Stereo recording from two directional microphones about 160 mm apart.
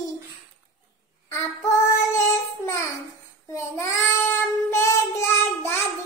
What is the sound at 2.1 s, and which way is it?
Child singing, 20° left (ahead or behind).